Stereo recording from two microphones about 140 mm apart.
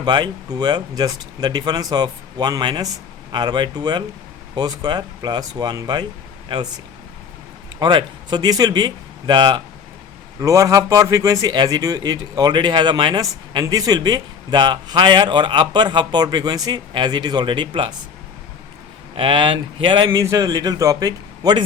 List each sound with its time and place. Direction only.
0.0 s a man's voice: 30° right (ahead or behind)
7.8 s a man's voice: 30° right (ahead or behind)
19.1 s a man's voice: 35° right (ahead or behind)
20.1 s speech: 20° right (ahead or behind)